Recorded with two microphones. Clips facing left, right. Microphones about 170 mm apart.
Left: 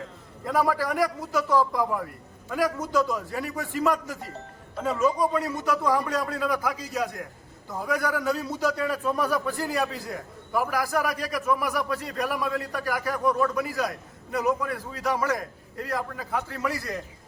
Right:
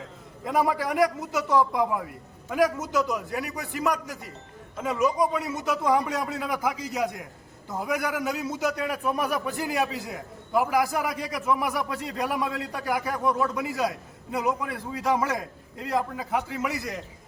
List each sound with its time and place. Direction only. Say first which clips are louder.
0.4 s a man's voice: even; 20° right (ahead or behind)
4.8 s a man's voice: even; 15° right (ahead or behind)